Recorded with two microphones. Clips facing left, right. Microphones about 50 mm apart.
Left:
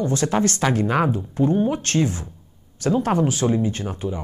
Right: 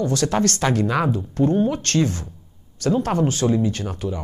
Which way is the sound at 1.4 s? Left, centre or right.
Centre.